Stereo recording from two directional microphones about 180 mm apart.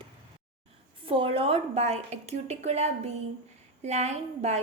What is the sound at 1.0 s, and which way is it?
A woman's voice, 30° right (ahead or behind).